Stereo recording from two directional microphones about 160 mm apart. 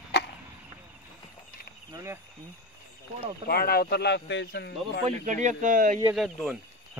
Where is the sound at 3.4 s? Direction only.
70° left (ahead or behind); by 5.0 s 90° left.